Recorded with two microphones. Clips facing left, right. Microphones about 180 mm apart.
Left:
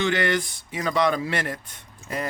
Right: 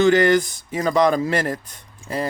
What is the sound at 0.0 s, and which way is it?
Speech, 40° right (ahead or behind).